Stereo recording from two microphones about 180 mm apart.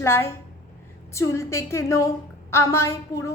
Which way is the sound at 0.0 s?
15° left (ahead or behind).